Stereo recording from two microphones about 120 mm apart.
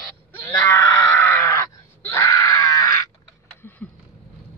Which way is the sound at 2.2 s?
25° left (ahead or behind).